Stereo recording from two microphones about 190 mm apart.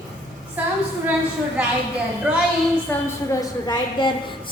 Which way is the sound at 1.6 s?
5° right (ahead or behind).